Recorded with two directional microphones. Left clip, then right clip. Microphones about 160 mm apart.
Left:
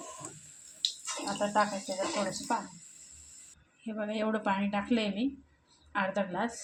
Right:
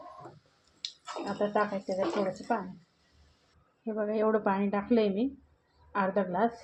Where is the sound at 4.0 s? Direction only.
25° right (ahead or behind).